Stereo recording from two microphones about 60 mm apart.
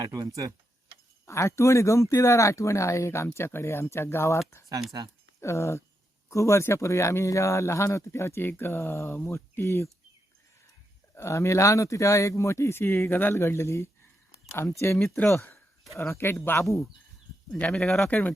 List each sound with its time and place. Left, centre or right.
0.0 s speech: right
1.3 s speech: left
5.4 s speech: left
11.1 s speech: left
14.8 s speech: left
16.0 s speech: left
17.7 s speech: centre
18.1 s speech: left